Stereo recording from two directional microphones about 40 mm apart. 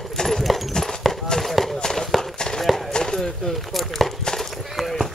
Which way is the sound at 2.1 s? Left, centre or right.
Centre.